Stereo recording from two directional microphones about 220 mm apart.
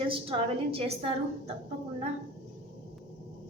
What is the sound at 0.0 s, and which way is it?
A woman's voice, 25° right (ahead or behind).